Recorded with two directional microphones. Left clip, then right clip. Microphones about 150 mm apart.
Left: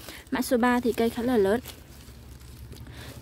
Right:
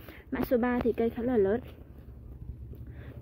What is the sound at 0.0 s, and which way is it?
Speech, 25° left (ahead or behind).